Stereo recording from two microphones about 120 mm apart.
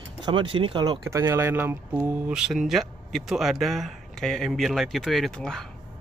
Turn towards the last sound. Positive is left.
turn(degrees=5)  # may be behind; listen again after turning